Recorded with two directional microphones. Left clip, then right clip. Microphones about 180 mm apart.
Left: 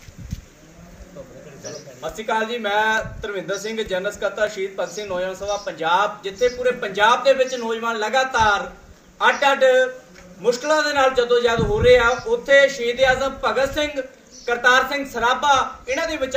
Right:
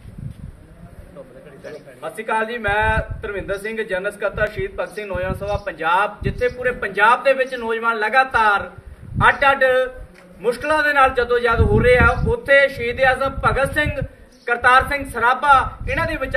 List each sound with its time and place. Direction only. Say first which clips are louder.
2.0 s speech: right 1 dB; 5° left (ahead or behind)